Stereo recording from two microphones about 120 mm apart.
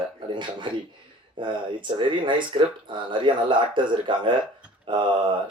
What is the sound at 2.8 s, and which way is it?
Speech, 45° right (ahead or behind).